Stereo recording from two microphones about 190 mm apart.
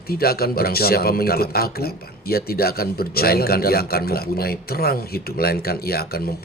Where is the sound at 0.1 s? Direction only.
55° left (ahead or behind).